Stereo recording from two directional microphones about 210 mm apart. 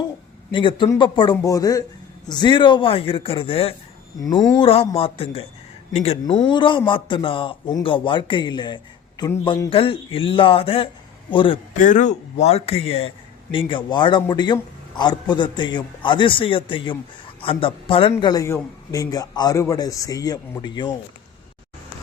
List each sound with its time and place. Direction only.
0.5 s a man's voice: 25° left (ahead or behind)
11.8 s a man's voice: 35° left (ahead or behind); by 20.9 s 20° left (ahead or behind)